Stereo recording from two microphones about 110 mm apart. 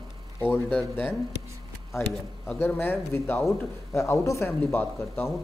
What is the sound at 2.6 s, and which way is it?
A man's voice, 20° left (ahead or behind).